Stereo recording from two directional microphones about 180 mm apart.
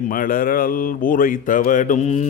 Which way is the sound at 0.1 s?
50° left (ahead or behind).